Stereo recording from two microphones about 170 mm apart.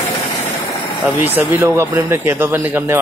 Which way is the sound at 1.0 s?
10° right (ahead or behind).